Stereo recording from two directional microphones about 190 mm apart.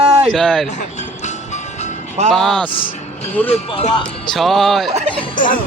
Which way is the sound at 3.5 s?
30° left (ahead or behind).